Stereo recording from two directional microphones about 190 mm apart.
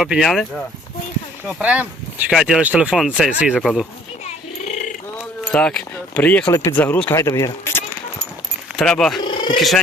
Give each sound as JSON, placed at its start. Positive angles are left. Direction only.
{"t": 0.0, "sound": "speech", "side_deg": 0}
{"t": 5.5, "sound": "speech", "side_deg": 5}
{"t": 8.7, "sound": "speech", "side_deg": 0}
{"t": 9.2, "sound": "purr", "side_deg": 25}
{"t": 9.6, "sound": "speech", "side_deg": 0}